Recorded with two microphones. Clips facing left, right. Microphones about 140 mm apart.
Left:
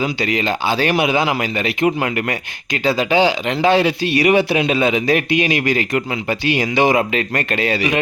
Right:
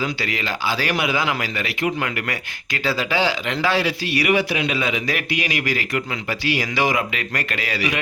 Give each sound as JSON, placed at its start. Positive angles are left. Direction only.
{"t": 0.0, "sound": "speech", "side_deg": 20}